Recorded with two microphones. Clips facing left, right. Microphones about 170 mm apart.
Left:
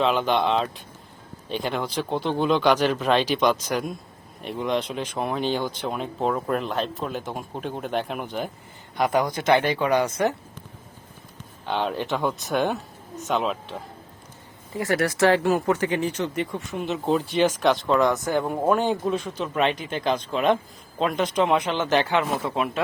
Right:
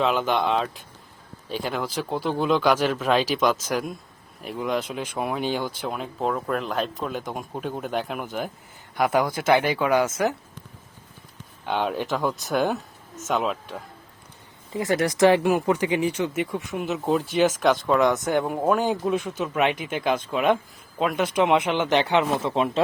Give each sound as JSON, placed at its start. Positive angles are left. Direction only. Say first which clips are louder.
{"t": 0.0, "sound": "speech", "louder": "left 1 dB", "side_deg": -5}
{"t": 11.6, "sound": "speech", "louder": "right 1 dB", "side_deg": -10}
{"t": 14.7, "sound": "speech", "louder": "right 1 dB", "side_deg": -20}
{"t": 16.7, "sound": "speech", "louder": "even", "side_deg": -5}
{"t": 19.1, "sound": "speech", "louder": "right 2 dB", "side_deg": -50}
{"t": 19.4, "sound": "speech", "louder": "even", "side_deg": -10}
{"t": 21.5, "sound": "speech", "louder": "right 1 dB", "side_deg": -15}